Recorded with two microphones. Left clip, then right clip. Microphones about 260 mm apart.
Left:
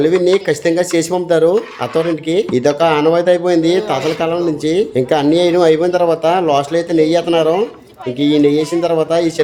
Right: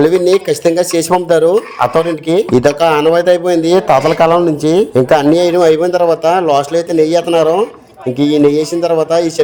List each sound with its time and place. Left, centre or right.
0.0 s speech: right